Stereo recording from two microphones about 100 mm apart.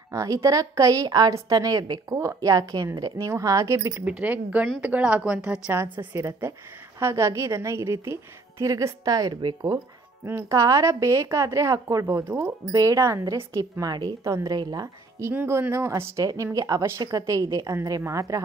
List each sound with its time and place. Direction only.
0.1 s a woman's voice: 35° right (ahead or behind)
4.0 s speech: 15° right (ahead or behind)
5.7 s a woman's voice: 25° right (ahead or behind); by 9.8 s 45° right (ahead or behind)
10.2 s a woman's voice: 35° right (ahead or behind)
15.2 s a woman's voice: 25° right (ahead or behind)